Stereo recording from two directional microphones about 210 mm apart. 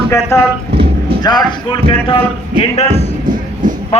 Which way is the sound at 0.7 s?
25° right (ahead or behind).